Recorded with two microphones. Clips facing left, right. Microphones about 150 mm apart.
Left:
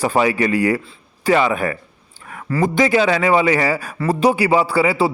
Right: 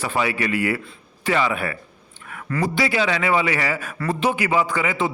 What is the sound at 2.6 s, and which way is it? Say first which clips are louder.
A man's voice: left 6 dB; 45° left (ahead or behind).